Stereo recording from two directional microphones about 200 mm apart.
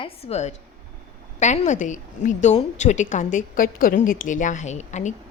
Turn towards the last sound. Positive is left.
turn(degrees=35)  # may be behind; listen again after turning